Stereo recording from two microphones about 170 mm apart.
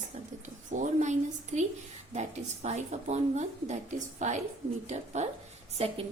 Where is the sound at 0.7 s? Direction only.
45° right (ahead or behind).